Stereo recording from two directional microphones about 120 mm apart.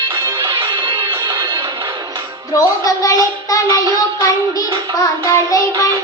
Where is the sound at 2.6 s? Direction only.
30° left (ahead or behind).